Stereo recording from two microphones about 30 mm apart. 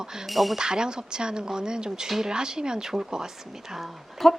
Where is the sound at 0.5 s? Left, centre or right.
Right.